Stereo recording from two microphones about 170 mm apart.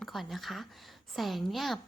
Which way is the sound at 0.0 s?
Centre (ahead or behind).